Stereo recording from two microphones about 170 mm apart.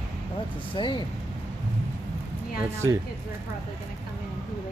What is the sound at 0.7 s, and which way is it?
Speech, 25° left (ahead or behind).